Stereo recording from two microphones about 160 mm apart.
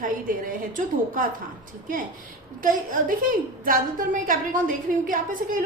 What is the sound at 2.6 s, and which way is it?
A woman's voice, 60° right (ahead or behind).